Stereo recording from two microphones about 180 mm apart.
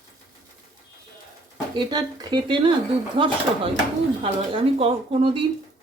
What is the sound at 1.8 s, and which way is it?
Speech, 25° right (ahead or behind).